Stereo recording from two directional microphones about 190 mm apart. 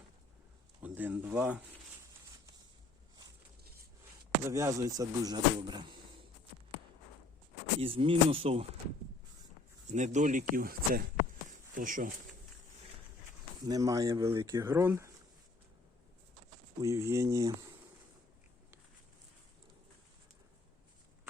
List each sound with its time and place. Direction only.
0.8 s speech: 10° right (ahead or behind)
4.4 s speech: 15° right (ahead or behind)
7.8 s speech: 30° right (ahead or behind)
9.9 s speech: 40° right (ahead or behind)
13.7 s speech: 20° right (ahead or behind)
16.8 s speech: 15° right (ahead or behind)